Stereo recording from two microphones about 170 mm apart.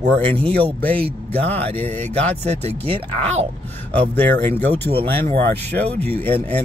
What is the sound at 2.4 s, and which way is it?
Speech, 40° right (ahead or behind).